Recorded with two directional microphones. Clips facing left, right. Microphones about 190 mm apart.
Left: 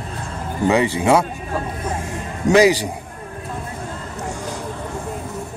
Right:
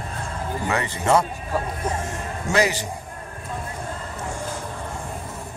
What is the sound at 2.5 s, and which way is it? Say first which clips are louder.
Speech: left 8 dB; 15° left (ahead or behind).